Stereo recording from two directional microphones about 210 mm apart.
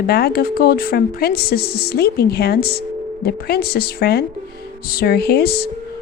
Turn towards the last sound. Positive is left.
turn(degrees=50)  # may be behind; listen again after turning